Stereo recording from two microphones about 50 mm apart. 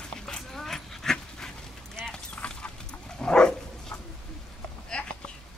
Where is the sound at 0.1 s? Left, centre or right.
Centre.